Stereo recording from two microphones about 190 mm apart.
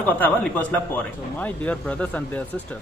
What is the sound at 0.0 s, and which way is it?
Speech, 10° left (ahead or behind).